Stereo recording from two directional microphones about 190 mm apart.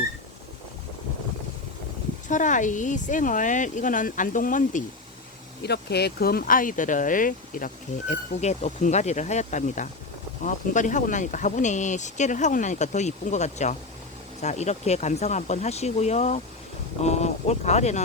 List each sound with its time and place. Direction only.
2.2 s speech: 40° left (ahead or behind)
5.6 s speech: 60° left (ahead or behind); by 18.0 s 35° left (ahead or behind)